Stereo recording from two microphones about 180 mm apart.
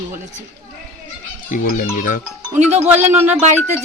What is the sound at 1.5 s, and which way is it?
Speech, 50° left (ahead or behind).